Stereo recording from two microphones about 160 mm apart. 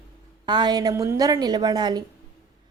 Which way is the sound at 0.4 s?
25° right (ahead or behind).